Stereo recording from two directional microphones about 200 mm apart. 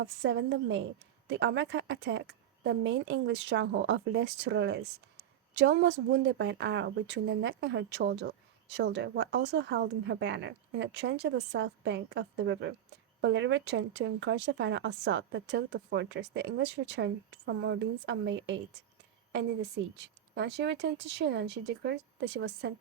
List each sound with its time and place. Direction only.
0.0 s speech: 65° right (ahead or behind)
20.0 s speech: 60° right (ahead or behind)